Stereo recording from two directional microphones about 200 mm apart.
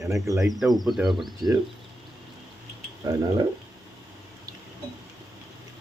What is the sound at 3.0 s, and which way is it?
Speech, 20° right (ahead or behind).